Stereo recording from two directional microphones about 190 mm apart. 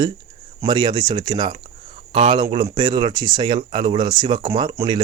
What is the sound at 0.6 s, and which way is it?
Speech, 25° right (ahead or behind).